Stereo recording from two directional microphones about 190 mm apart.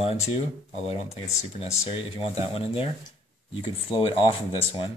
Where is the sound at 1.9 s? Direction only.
30° left (ahead or behind).